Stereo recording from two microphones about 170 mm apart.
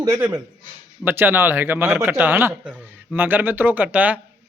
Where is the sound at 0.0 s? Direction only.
20° right (ahead or behind).